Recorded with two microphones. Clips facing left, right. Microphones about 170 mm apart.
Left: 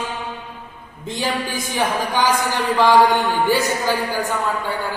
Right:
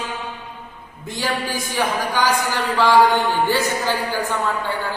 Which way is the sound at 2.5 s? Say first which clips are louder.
Left 3 dB; 15° left (ahead or behind).